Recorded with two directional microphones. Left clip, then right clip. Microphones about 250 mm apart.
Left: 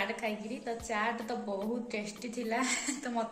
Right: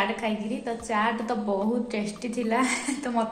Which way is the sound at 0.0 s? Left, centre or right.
Centre.